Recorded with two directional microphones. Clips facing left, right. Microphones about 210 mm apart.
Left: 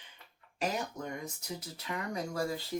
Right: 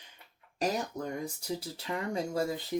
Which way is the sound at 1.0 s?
30° right (ahead or behind).